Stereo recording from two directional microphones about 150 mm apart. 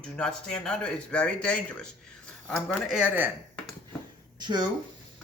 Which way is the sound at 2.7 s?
5° right (ahead or behind).